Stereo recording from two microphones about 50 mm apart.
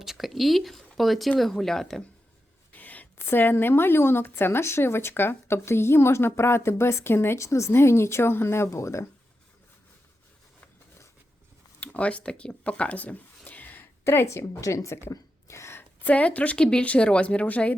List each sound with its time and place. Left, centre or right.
0.0 s speech: centre
2.7 s a sound: left
3.2 s speech: left
7.3 s speech: left
7.7 s speech: left
11.8 s speech: left
14.0 s a woman's voice: left
15.0 s a sound: left
16.0 s speech: left